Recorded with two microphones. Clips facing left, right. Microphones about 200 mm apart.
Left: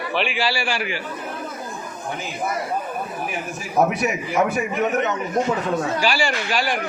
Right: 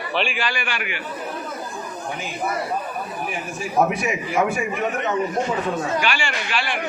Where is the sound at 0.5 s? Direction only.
35° left (ahead or behind).